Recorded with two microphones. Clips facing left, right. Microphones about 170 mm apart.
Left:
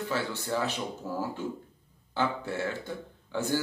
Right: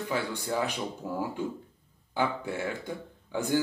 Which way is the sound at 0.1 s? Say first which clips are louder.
Right 1 dB; 15° right (ahead or behind).